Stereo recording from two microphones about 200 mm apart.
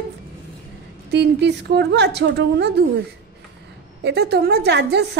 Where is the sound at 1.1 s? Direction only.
60° right (ahead or behind).